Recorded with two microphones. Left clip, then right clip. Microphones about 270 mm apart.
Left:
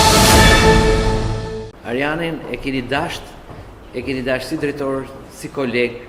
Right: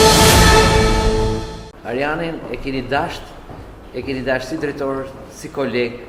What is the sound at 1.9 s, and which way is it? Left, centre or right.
A man's voice, left.